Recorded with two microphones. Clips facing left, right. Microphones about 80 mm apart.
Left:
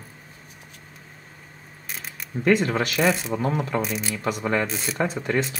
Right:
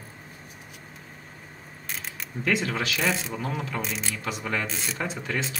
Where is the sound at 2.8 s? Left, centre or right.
Left.